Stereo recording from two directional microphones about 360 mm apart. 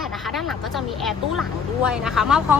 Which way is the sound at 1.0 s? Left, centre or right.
Centre.